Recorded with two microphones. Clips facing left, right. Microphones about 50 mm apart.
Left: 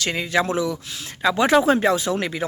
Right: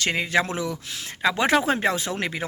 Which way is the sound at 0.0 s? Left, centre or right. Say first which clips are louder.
Left 1 dB; right.